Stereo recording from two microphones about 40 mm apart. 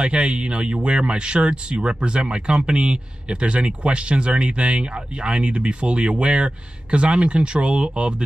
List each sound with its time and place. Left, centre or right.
0.0 s speech: right